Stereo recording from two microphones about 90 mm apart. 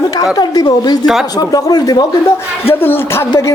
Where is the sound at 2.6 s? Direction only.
25° left (ahead or behind).